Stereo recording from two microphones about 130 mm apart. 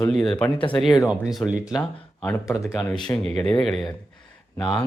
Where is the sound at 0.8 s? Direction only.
5° right (ahead or behind).